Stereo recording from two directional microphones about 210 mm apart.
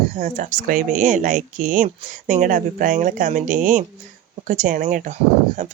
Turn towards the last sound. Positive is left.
turn(degrees=-40)  # may be behind; listen again after turning